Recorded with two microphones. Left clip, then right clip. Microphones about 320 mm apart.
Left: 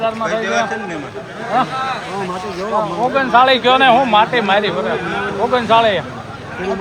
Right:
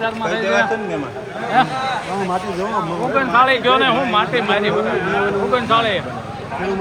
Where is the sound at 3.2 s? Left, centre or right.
Left.